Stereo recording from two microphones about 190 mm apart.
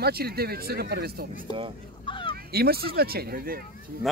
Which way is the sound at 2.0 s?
25° left (ahead or behind).